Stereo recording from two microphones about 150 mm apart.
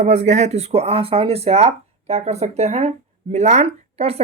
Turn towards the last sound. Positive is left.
turn(degrees=-40)  # may be behind; listen again after turning